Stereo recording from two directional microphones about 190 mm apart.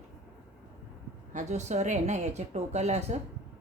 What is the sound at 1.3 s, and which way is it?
Speech, 40° right (ahead or behind).